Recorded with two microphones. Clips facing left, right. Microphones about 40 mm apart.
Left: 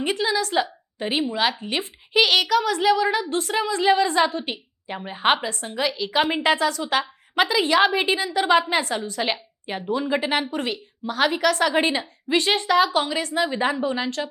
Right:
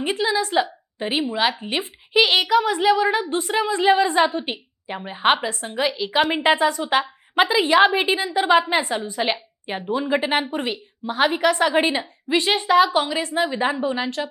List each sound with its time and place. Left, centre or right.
0.0 s a child's voice: centre
4.9 s a child's voice: centre
5.4 s a woman's voice: right
6.3 s a woman's voice: right
11.7 s a child's voice: centre